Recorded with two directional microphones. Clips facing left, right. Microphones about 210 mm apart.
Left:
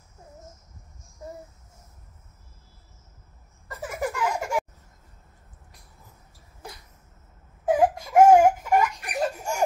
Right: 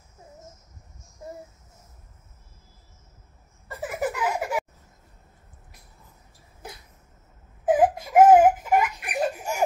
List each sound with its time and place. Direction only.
3.6 s a sound: 5° right (ahead or behind)
7.6 s baby cry: 5° right (ahead or behind)
8.2 s laughter: 5° right (ahead or behind)